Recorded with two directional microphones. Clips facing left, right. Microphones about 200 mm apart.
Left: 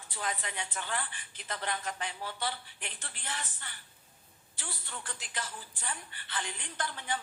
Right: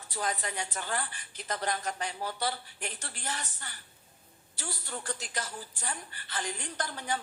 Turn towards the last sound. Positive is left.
turn(degrees=-40)  # may be behind; listen again after turning